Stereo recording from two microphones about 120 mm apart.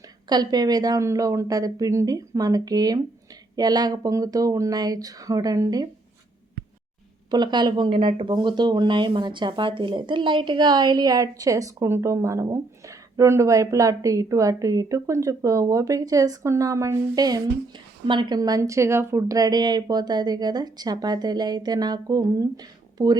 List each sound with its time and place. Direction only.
0.3 s speech: 35° right (ahead or behind)
7.3 s speech: 35° right (ahead or behind)